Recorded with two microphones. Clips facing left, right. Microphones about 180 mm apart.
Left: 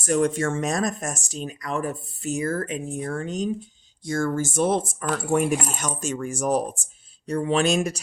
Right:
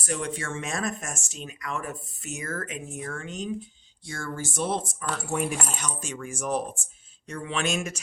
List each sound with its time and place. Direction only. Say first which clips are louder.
0.0 s speech: left 10 dB; 45° left (ahead or behind)